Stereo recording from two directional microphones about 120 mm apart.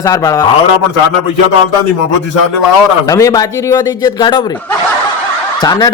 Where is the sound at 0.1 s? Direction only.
30° left (ahead or behind).